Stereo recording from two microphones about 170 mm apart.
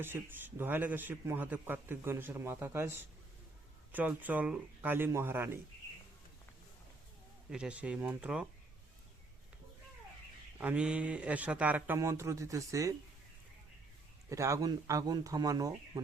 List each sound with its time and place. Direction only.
0.0 s a man's voice: 10° right (ahead or behind)
7.5 s a man's voice: 5° right (ahead or behind)
10.6 s a man's voice: 10° right (ahead or behind)
14.3 s speech: 15° right (ahead or behind)